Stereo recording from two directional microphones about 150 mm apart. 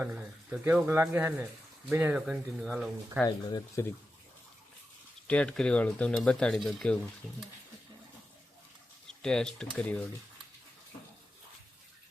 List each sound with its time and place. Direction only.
0.0 s speech: 10° right (ahead or behind)
3.2 s speech: 25° left (ahead or behind)
5.3 s speech: 5° left (ahead or behind)
7.2 s speech: 5° right (ahead or behind)
9.0 s speech: 5° left (ahead or behind)